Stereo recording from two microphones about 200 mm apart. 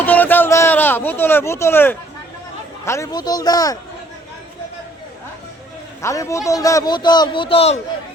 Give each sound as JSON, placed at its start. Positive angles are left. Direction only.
{"t": 0.0, "sound": "a sound", "side_deg": 10}
{"t": 2.8, "sound": "a man's voice", "side_deg": 15}
{"t": 6.0, "sound": "a man's voice", "side_deg": 15}